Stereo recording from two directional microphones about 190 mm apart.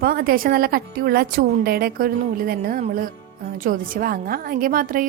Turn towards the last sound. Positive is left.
turn(degrees=-50)  # may be behind; listen again after turning